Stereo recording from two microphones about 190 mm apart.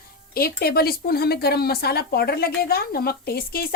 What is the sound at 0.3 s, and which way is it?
A woman's voice, 55° left (ahead or behind).